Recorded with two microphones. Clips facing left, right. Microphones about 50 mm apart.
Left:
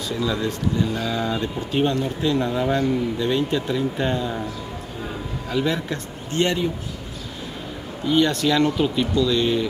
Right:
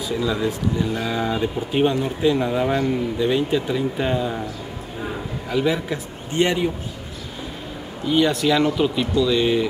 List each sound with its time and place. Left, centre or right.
0.1 s a man's voice: centre
8.1 s speech: centre